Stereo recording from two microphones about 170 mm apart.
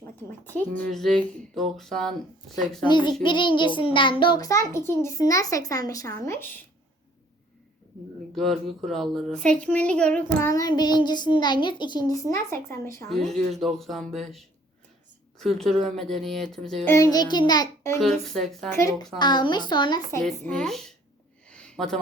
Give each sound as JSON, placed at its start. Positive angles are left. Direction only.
{"t": 0.0, "sound": "a sound", "side_deg": 10}
{"t": 0.8, "sound": "speech", "side_deg": 0}
{"t": 2.8, "sound": "a child's voice", "side_deg": 25}
{"t": 8.4, "sound": "speech", "side_deg": 0}
{"t": 10.5, "sound": "a child's voice", "side_deg": 25}
{"t": 13.1, "sound": "speech", "side_deg": 0}
{"t": 16.9, "sound": "a child's voice", "side_deg": 20}
{"t": 18.0, "sound": "speech", "side_deg": 0}
{"t": 18.7, "sound": "a child's voice", "side_deg": 20}
{"t": 20.5, "sound": "speech", "side_deg": 0}
{"t": 21.4, "sound": "a sound", "side_deg": 5}